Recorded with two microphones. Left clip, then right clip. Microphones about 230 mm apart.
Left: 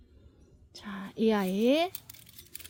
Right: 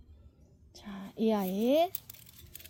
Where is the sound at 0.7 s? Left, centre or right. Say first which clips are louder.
Left 5 dB; centre.